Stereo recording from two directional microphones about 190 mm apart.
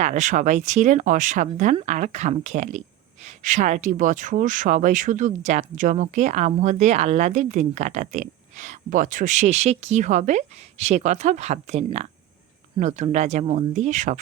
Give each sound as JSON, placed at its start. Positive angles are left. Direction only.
{"t": 0.0, "sound": "speech", "side_deg": -40}